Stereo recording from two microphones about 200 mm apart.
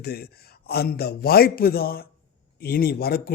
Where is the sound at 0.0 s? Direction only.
50° left (ahead or behind).